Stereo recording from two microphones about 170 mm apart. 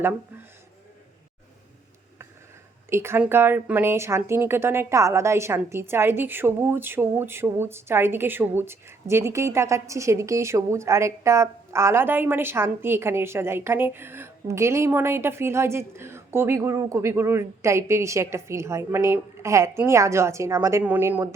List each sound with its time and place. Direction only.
2.9 s a woman's voice: 15° right (ahead or behind)